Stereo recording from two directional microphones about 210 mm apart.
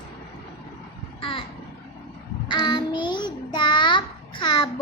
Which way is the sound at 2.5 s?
20° left (ahead or behind).